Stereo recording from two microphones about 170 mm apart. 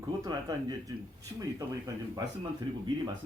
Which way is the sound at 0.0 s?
20° right (ahead or behind).